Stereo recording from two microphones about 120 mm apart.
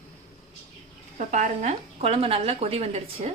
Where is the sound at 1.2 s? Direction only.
90° right.